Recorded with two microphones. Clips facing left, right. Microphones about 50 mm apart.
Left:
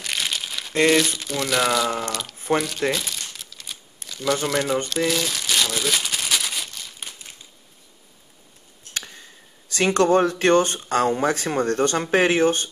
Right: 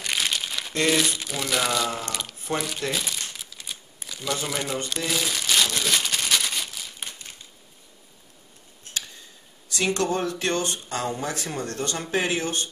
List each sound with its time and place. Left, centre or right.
0.0 s crumpling: centre
0.8 s speech: centre
2.9 s crumpling: centre
4.5 s speech: centre
5.0 s crumpling: centre
8.9 s tick-tock: left
9.8 s speech: left